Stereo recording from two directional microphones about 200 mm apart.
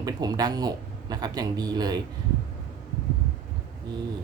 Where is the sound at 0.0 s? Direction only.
20° right (ahead or behind).